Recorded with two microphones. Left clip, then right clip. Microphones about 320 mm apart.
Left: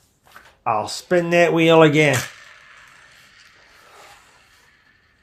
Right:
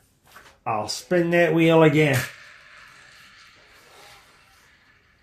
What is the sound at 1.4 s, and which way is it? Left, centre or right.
Speech, left.